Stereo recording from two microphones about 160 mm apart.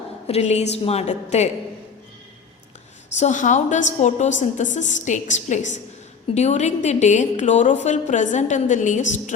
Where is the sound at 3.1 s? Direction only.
50° left (ahead or behind).